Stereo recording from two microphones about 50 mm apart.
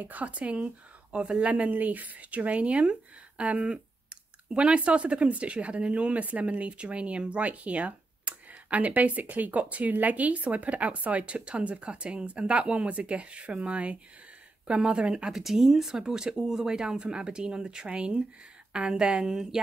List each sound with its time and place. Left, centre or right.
0.0 s speech: right
15.3 s speech: centre